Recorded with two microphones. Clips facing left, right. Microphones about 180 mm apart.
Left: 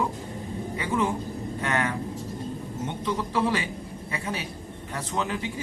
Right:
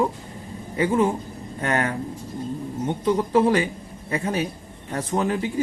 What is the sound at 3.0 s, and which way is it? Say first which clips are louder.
Speech: right 8 dB; 45° right (ahead or behind).